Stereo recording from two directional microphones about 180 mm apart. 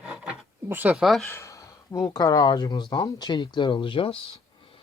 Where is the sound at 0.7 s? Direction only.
10° right (ahead or behind).